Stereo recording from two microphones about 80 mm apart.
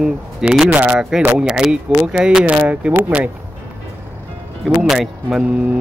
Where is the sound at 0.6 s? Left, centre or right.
Centre.